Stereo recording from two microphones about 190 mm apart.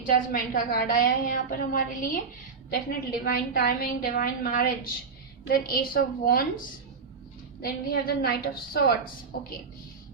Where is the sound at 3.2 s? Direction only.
50° left (ahead or behind).